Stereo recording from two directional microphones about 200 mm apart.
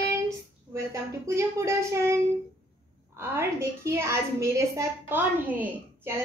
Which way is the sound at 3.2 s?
10° right (ahead or behind).